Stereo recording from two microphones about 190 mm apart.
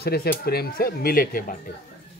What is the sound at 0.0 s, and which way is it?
Speech, 55° left (ahead or behind).